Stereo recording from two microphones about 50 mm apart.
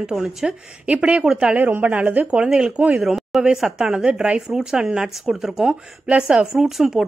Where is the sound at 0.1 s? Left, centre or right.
Centre.